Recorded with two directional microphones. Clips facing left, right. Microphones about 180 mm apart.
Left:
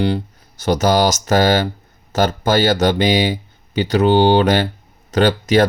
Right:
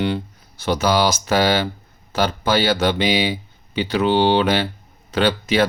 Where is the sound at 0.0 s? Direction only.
40° left (ahead or behind).